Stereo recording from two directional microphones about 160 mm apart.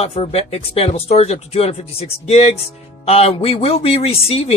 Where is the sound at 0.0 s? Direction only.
40° left (ahead or behind).